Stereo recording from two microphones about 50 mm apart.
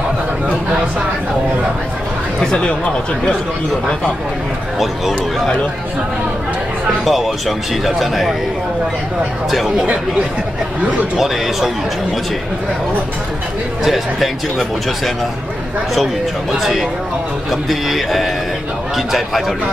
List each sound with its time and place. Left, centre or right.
2.5 s speech: left
4.7 s speech: centre
7.1 s speech: centre
11.1 s speech: centre
13.8 s speech: centre
16.5 s speech: centre